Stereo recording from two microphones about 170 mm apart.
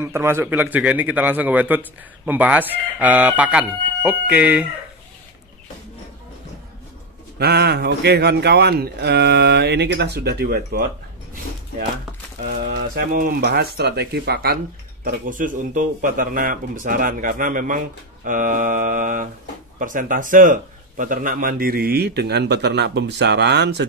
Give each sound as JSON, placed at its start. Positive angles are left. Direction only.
{"t": 0.0, "sound": "a man's voice", "side_deg": -15}
{"t": 7.3, "sound": "speech", "side_deg": -70}
{"t": 12.4, "sound": "speech", "side_deg": -65}
{"t": 15.0, "sound": "a man's voice", "side_deg": -50}